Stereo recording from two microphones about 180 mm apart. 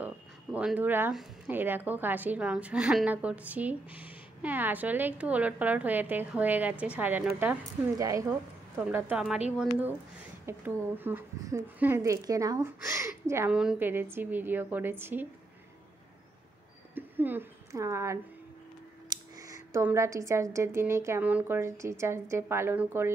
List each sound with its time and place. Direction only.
0.0 s a sound: 5° right (ahead or behind)
1.1 s a woman's voice: 10° right (ahead or behind)
9.1 s a woman's voice: 5° right (ahead or behind)
16.9 s a woman's voice: 10° right (ahead or behind)